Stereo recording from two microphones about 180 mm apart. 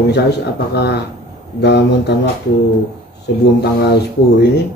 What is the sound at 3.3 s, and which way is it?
Speech, 70° left (ahead or behind).